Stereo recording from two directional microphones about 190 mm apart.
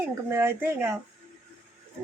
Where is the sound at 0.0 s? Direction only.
15° right (ahead or behind).